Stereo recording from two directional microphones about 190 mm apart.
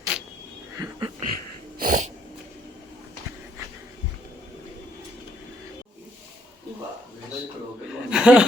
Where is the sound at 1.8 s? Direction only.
45° right (ahead or behind).